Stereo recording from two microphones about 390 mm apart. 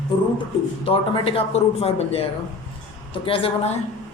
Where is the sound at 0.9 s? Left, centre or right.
Centre.